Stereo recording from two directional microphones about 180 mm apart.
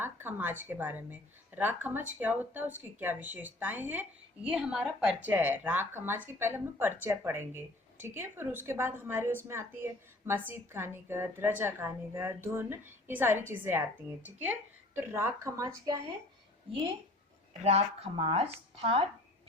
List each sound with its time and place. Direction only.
0.0 s a woman's voice: 10° right (ahead or behind)
17.6 s speech: 35° right (ahead or behind)